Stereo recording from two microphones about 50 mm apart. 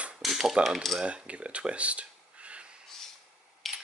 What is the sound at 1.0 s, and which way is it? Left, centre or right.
Speech, right.